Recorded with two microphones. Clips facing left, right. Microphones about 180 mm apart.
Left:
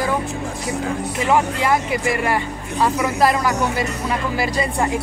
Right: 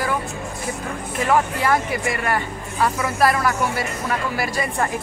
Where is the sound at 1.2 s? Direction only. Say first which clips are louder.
Left 1 dB; 20° left (ahead or behind).